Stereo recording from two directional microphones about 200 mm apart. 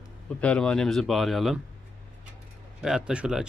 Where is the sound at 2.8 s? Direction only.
5° right (ahead or behind).